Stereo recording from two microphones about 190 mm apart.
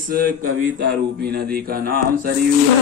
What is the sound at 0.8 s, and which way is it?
Speech, 65° right (ahead or behind).